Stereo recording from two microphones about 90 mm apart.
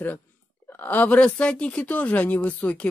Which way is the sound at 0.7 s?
20° left (ahead or behind).